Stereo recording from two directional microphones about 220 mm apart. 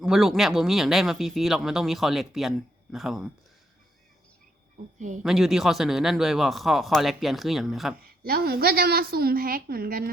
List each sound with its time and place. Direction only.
0.0 s speech: centre (ahead or behind)
4.9 s speech: 35° right (ahead or behind)
5.2 s speech: centre (ahead or behind)
8.2 s a woman's voice: 45° right (ahead or behind)